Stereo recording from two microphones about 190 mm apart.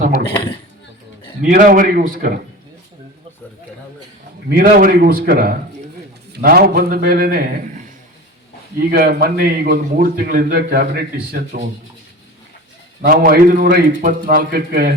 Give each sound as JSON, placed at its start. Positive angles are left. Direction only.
{"t": 1.4, "sound": "a man's voice", "side_deg": -45}
{"t": 4.4, "sound": "a man's voice", "side_deg": -55}
{"t": 8.9, "sound": "a man's voice", "side_deg": -50}
{"t": 13.0, "sound": "a man's voice", "side_deg": -50}